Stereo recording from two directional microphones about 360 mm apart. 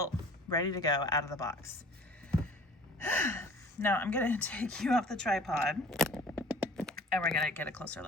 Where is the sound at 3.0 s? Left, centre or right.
Centre.